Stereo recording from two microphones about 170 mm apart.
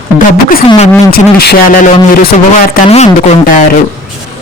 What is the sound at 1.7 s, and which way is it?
Speech, 50° left (ahead or behind).